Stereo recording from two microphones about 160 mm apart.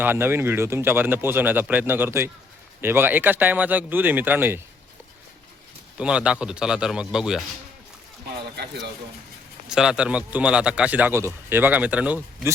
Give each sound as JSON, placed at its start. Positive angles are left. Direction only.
{"t": 0.0, "sound": "speech", "side_deg": -15}
{"t": 6.0, "sound": "a man's voice", "side_deg": -5}
{"t": 8.5, "sound": "speech", "side_deg": -90}
{"t": 9.6, "sound": "speech", "side_deg": -5}